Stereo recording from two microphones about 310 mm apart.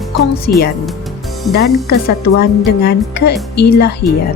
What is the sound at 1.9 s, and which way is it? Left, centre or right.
A woman's voice, left.